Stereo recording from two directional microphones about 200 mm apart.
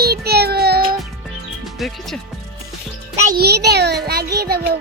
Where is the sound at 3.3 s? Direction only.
50° right (ahead or behind).